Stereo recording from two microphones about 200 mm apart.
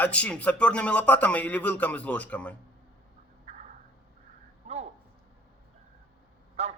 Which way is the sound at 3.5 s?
30° right (ahead or behind).